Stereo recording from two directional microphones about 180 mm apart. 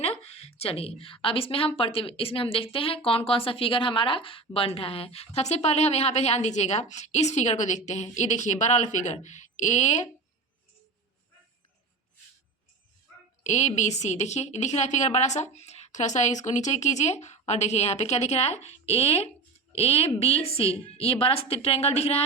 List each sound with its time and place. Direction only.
0.2 s a woman's voice: 35° left (ahead or behind)
13.4 s a woman's voice: 40° left (ahead or behind)